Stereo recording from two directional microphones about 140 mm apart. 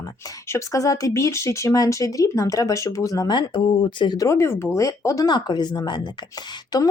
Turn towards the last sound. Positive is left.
turn(degrees=30)  # may be behind; listen again after turning